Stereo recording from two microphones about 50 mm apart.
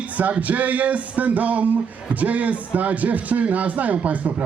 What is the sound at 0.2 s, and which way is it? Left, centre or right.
Speech, right.